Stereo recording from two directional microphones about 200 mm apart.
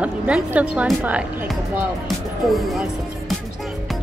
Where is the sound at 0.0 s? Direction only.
5° right (ahead or behind).